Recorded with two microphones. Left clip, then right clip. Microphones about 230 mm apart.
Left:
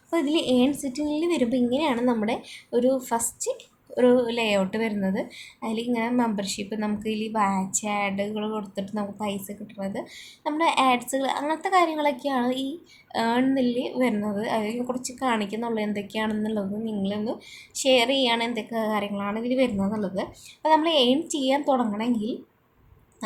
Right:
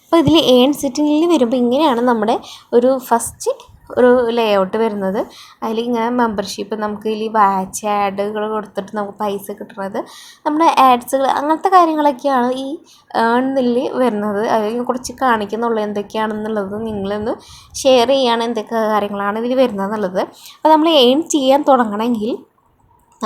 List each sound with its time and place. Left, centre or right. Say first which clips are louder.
0.1 s a woman's voice: right 13 dB; right